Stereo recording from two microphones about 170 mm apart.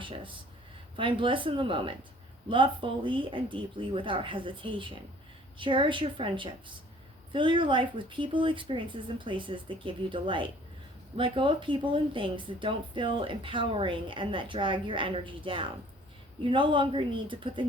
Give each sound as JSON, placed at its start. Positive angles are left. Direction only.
{"t": 0.0, "sound": "speech", "side_deg": -30}